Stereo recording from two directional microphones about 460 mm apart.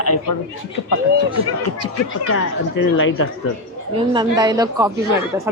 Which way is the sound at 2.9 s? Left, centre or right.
Left.